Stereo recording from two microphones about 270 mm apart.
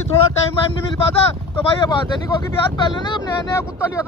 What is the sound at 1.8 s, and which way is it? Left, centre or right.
Speech, centre.